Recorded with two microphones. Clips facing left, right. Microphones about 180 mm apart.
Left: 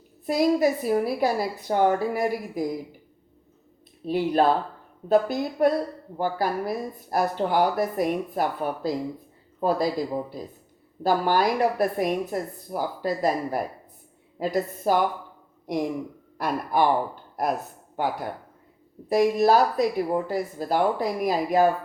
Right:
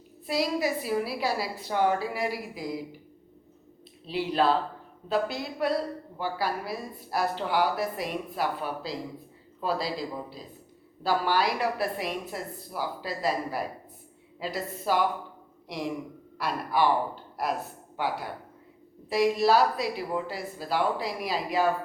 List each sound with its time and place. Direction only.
0.3 s a woman's voice: 45° left (ahead or behind)
4.0 s a woman's voice: 50° left (ahead or behind)
17.9 s a woman's voice: 50° left (ahead or behind)